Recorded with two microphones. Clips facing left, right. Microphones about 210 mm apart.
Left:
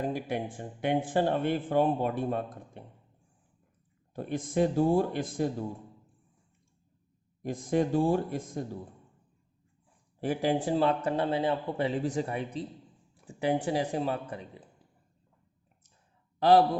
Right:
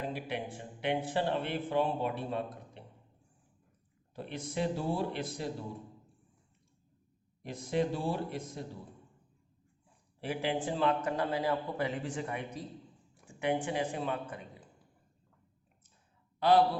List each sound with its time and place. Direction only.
0.0 s speech: 45° left (ahead or behind)
4.1 s speech: 50° left (ahead or behind)
7.4 s speech: 50° left (ahead or behind)
10.2 s a man's voice: 45° left (ahead or behind)
16.4 s speech: 45° left (ahead or behind)